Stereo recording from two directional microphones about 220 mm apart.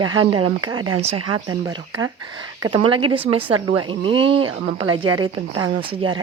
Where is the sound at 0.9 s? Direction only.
25° right (ahead or behind).